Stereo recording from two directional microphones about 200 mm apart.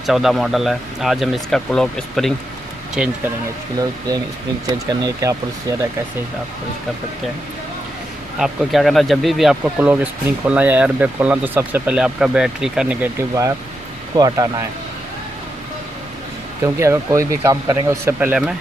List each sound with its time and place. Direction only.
0.0 s speech: centre (ahead or behind)
3.8 s speech: 20° right (ahead or behind)
8.4 s speech: centre (ahead or behind)
14.2 s speech: 20° right (ahead or behind)
16.6 s speech: 15° right (ahead or behind)